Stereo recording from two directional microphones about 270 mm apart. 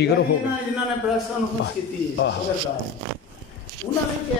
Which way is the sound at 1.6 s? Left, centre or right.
Left.